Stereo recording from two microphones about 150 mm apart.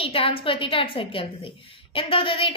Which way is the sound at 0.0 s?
35° left (ahead or behind).